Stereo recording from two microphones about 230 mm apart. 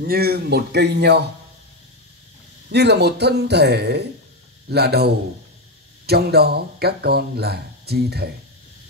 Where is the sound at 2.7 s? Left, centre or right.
Right.